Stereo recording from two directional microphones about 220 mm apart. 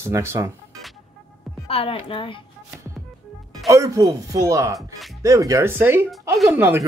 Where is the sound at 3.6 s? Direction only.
15° right (ahead or behind).